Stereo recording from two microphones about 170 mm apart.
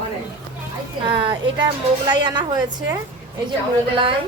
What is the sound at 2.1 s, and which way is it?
Speech, 25° right (ahead or behind).